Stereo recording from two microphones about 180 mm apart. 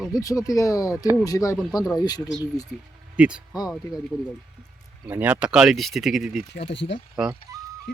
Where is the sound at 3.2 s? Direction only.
5° right (ahead or behind).